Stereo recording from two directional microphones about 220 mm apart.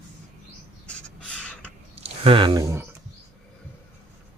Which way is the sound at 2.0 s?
25° right (ahead or behind).